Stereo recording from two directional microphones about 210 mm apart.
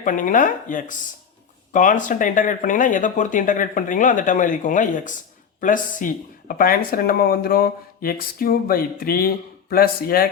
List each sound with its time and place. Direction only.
0.0 s speech: 40° left (ahead or behind)